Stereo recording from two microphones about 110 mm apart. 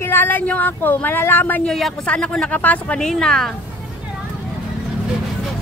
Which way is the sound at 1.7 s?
5° left (ahead or behind).